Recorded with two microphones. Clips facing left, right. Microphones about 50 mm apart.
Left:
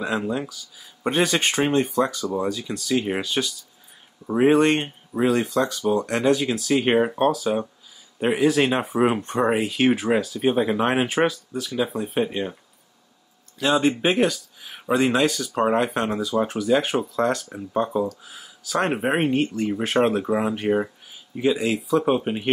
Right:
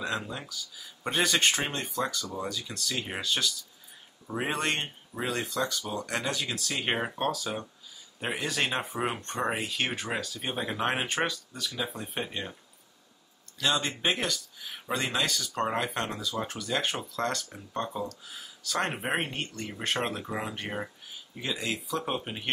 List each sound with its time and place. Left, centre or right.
0.0 s speech: centre
8.3 s speech: centre
13.6 s speech: centre
22.0 s speech: centre